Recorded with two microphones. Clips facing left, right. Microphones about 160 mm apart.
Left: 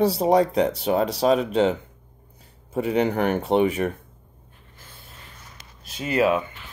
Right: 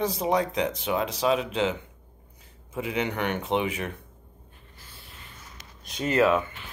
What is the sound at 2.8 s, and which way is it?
Speech, 40° left (ahead or behind).